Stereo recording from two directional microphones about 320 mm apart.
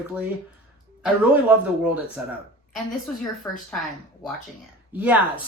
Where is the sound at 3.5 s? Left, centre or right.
Centre.